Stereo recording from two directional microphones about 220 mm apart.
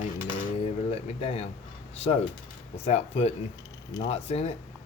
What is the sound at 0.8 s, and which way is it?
Speech, 30° left (ahead or behind).